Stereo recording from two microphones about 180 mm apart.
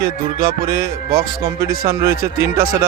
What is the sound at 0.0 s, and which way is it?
Speech, 55° right (ahead or behind).